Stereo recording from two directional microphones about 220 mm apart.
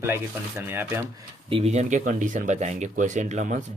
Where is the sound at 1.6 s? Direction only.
30° right (ahead or behind).